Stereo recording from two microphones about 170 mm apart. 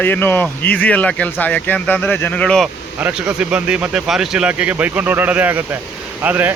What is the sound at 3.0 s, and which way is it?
Speech, 5° right (ahead or behind).